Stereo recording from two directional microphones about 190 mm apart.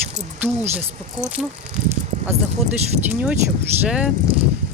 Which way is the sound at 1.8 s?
40° right (ahead or behind).